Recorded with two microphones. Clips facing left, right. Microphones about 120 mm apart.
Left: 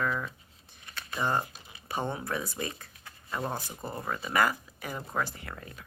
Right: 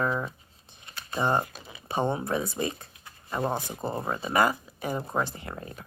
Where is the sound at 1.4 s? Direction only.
90° right.